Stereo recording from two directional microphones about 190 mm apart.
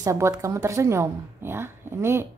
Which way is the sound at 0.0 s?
15° right (ahead or behind).